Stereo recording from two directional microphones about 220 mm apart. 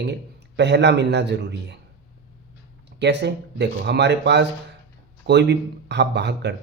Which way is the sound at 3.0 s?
50° right (ahead or behind).